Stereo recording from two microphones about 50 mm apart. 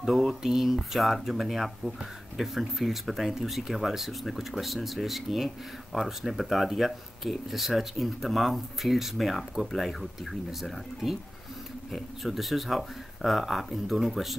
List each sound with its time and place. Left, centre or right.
0.0 s speech: centre